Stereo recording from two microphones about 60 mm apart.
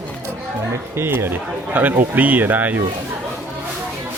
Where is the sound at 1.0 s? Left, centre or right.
Right.